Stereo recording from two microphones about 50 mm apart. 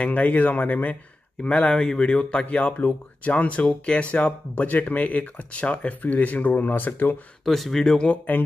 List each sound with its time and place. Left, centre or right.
0.0 s speech: left
1.4 s speech: left
7.4 s speech: centre
8.1 s speech: left